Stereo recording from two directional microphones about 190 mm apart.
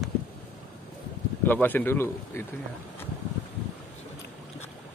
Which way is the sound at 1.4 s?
10° left (ahead or behind).